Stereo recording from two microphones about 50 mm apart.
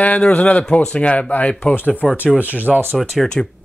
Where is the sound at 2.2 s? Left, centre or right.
Right.